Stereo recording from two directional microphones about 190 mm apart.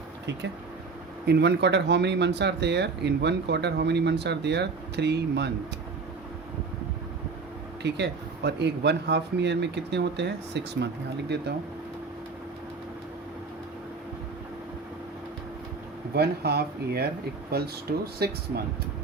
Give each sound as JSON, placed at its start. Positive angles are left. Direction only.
{"t": 1.3, "sound": "speech", "side_deg": -60}
{"t": 7.8, "sound": "speech", "side_deg": -60}
{"t": 16.1, "sound": "speech", "side_deg": -55}